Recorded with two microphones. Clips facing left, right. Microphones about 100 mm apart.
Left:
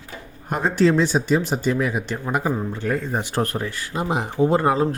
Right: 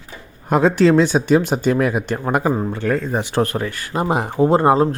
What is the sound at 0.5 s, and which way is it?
Speech, 90° right.